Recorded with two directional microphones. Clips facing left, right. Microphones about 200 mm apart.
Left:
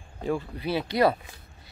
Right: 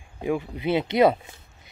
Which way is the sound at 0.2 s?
15° right (ahead or behind).